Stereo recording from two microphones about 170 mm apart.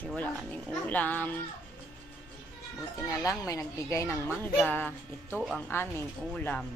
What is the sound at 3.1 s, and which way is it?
Speech, 20° left (ahead or behind).